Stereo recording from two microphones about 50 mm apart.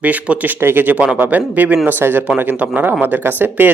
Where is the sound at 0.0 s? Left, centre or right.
Right.